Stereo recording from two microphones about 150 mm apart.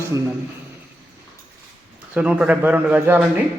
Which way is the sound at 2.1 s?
5° right (ahead or behind).